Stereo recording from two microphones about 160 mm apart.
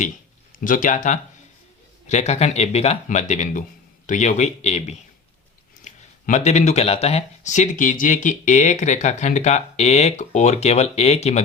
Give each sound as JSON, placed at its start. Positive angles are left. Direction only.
{"t": 0.6, "sound": "speech", "side_deg": 55}